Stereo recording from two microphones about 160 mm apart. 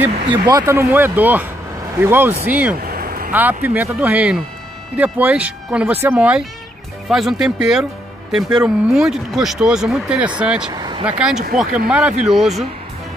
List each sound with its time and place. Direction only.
0.3 s speech: 25° right (ahead or behind); by 2.8 s 10° right (ahead or behind)
2.8 s a sound: 65° right (ahead or behind)
3.3 s speech: 10° right (ahead or behind)
10.7 s speech: 30° right (ahead or behind)
11.1 s speech: 5° right (ahead or behind)